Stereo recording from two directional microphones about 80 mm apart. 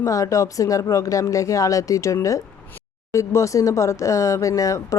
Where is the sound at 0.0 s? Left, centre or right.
Left.